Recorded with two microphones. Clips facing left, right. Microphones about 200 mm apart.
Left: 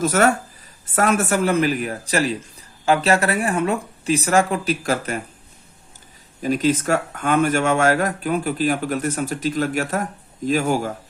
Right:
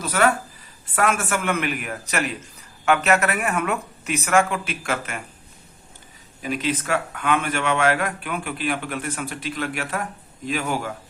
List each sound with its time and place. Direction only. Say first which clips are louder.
0.0 s speech: left 3 dB; 45° left (ahead or behind)
6.4 s speech: left 6 dB; 40° left (ahead or behind)